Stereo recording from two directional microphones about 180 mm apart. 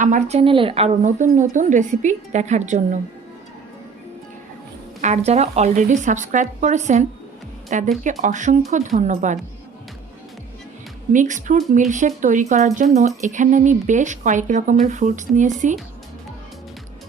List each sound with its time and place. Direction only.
0.0 s speech: 45° right (ahead or behind)
4.9 s speech: 40° right (ahead or behind)
11.1 s speech: 45° right (ahead or behind)